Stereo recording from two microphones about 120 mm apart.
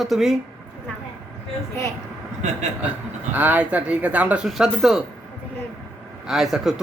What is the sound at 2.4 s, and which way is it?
Speech, 80° right.